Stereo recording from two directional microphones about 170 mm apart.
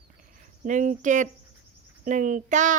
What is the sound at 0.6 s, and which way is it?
A woman's voice, 50° right (ahead or behind).